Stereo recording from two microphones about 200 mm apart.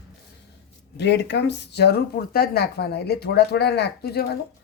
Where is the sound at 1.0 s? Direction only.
60° left (ahead or behind).